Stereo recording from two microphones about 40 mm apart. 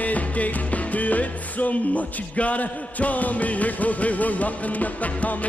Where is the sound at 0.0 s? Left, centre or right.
Left.